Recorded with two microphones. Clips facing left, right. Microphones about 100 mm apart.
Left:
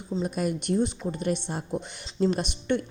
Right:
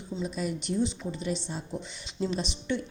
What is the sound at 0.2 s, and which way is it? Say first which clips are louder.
A woman's voice: left 4 dB; 55° left (ahead or behind).